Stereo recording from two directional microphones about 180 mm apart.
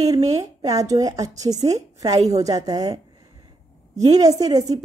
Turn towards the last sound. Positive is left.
turn(degrees=-20)  # may be behind; listen again after turning